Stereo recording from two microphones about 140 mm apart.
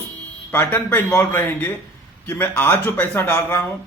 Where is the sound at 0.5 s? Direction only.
15° left (ahead or behind).